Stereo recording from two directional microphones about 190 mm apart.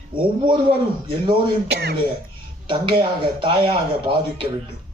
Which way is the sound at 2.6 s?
25° right (ahead or behind).